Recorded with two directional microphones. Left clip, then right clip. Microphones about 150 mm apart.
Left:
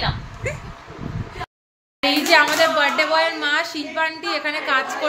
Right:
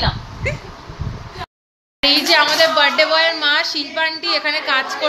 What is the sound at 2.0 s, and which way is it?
A woman's voice, 5° left (ahead or behind).